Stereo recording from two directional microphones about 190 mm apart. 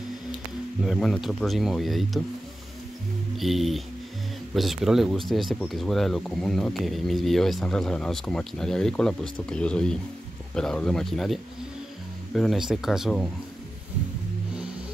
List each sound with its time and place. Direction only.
0.8 s speech: centre (ahead or behind)
3.3 s speech: centre (ahead or behind)
12.4 s speech: centre (ahead or behind)